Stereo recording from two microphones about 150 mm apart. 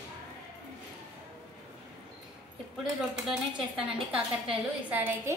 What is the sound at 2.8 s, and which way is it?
Speech, 5° right (ahead or behind).